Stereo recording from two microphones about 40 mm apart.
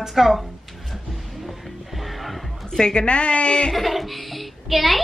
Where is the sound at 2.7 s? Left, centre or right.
Left.